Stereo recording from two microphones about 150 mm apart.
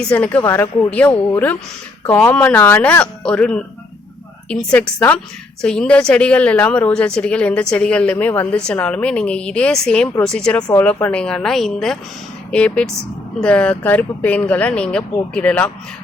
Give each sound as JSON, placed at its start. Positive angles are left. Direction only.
{"t": 0.0, "sound": "a woman's voice", "side_deg": 10}